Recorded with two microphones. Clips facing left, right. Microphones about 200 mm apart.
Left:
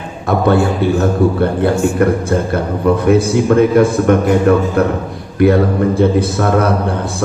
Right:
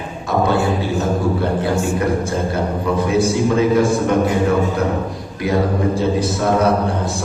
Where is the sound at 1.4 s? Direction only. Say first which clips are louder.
Left 5 dB; 60° left (ahead or behind).